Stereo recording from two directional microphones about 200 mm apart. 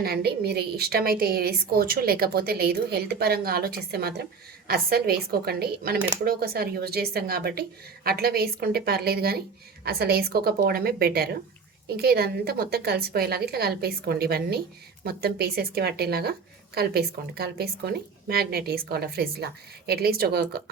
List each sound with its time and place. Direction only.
0.0 s a woman's voice: 50° right (ahead or behind)